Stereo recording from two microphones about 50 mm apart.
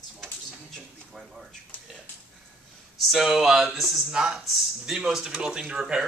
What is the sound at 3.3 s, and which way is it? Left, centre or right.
Speech, centre.